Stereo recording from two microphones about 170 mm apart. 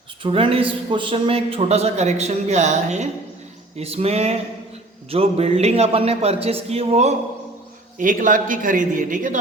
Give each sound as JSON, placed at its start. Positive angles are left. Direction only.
{"t": 0.2, "sound": "a man's voice", "side_deg": -30}
{"t": 7.9, "sound": "a man's voice", "side_deg": -50}